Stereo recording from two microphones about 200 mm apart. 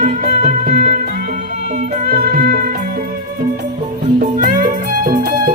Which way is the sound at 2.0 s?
50° right (ahead or behind).